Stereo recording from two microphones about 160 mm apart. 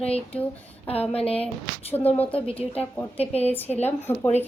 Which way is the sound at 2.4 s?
35° left (ahead or behind).